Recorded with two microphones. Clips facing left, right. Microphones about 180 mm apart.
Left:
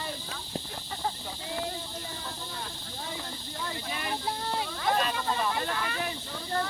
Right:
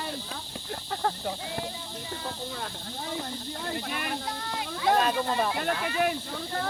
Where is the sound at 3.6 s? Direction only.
60° right (ahead or behind).